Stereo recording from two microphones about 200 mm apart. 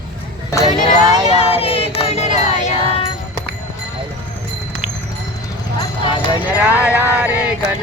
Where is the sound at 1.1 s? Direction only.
30° left (ahead or behind).